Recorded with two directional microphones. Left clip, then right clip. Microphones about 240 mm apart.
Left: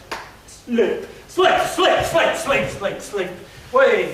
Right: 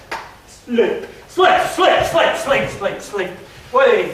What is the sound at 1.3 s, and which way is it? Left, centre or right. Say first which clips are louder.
Speech: right 3 dB; centre.